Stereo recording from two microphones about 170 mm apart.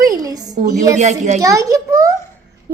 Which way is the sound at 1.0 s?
45° right (ahead or behind).